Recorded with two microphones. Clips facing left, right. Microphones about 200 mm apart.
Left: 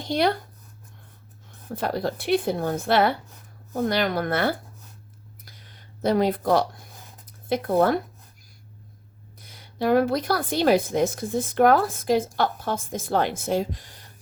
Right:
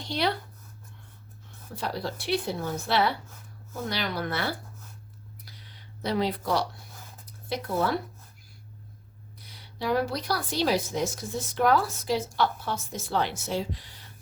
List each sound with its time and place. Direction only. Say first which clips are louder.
0.0 s speech: left 6 dB; 50° left (ahead or behind)
1.7 s a woman's voice: left 6 dB; 50° left (ahead or behind)
5.5 s a sound: even; 50° left (ahead or behind)
7.5 s a woman's voice: left 7 dB; 55° left (ahead or behind)
9.4 s a woman's voice: left 7 dB; 50° left (ahead or behind)